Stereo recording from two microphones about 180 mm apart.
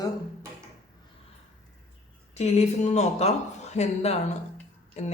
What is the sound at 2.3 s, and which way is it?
Speech, 35° left (ahead or behind).